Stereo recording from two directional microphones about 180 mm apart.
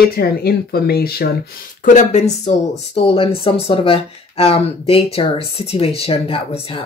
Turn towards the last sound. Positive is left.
turn(degrees=30)  # may be behind; listen again after turning